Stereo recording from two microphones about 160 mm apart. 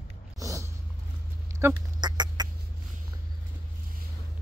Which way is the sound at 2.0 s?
25° right (ahead or behind).